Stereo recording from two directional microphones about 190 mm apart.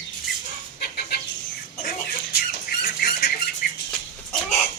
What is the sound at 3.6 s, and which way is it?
Bird flight, 45° left (ahead or behind).